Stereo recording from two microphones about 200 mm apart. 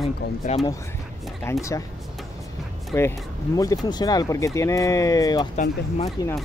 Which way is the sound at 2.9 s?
15° left (ahead or behind).